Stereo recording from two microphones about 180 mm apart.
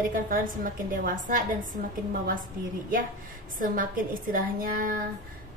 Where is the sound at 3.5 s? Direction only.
50° right (ahead or behind).